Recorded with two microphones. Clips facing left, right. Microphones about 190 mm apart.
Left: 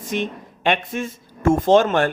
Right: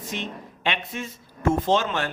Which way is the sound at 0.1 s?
50° left (ahead or behind).